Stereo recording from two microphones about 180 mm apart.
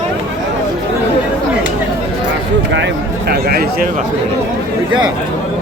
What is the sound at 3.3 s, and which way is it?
Speech, 60° right (ahead or behind).